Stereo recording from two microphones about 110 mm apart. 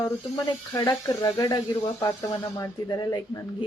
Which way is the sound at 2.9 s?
35° left (ahead or behind).